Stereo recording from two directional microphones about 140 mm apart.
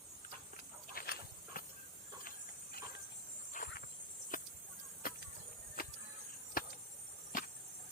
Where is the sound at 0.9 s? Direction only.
90° left.